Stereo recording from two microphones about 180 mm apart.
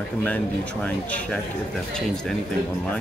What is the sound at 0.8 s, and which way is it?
Speech, 10° left (ahead or behind).